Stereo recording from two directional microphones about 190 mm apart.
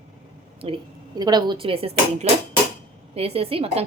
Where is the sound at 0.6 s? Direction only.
25° right (ahead or behind).